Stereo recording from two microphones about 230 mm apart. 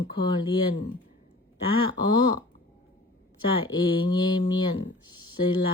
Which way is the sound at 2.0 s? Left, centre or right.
Centre.